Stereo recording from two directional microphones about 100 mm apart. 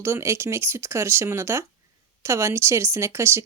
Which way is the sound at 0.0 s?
25° right (ahead or behind).